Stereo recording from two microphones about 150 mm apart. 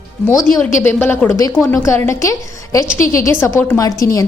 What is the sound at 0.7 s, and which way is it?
A woman's voice, 15° left (ahead or behind).